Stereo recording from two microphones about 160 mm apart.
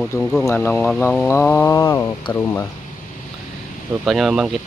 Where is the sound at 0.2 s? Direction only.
5° left (ahead or behind).